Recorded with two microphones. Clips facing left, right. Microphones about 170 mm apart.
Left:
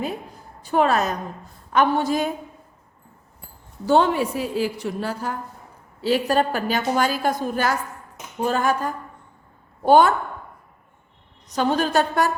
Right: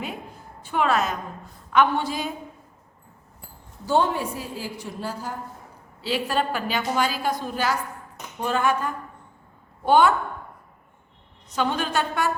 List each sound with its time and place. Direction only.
0.6 s a woman's voice: 40° left (ahead or behind)
3.8 s a woman's voice: 70° left (ahead or behind)
6.0 s a woman's voice: 45° left (ahead or behind)
8.4 s a woman's voice: 40° left (ahead or behind)
11.4 s a woman's voice: 40° left (ahead or behind)